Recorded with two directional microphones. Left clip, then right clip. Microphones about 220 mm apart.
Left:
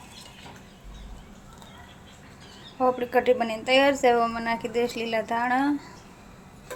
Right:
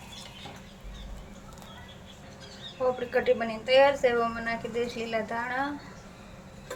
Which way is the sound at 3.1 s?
40° left (ahead or behind).